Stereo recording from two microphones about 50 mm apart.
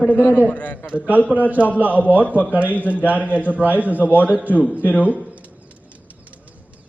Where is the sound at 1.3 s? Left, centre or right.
Right.